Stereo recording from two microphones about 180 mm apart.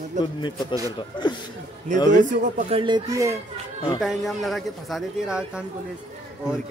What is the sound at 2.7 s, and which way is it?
Speech, 25° right (ahead or behind).